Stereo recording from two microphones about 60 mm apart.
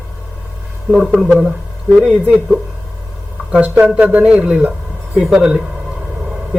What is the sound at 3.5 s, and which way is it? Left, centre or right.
A man's voice, right.